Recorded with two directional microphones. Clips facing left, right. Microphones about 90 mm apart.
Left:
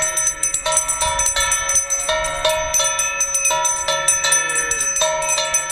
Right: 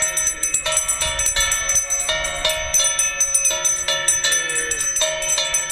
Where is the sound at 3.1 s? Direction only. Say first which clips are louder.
Left 7 dB; 35° left (ahead or behind).